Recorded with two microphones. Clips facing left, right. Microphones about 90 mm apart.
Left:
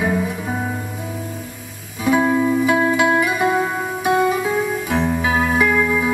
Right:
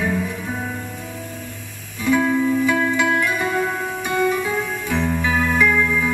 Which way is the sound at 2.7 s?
10° left (ahead or behind).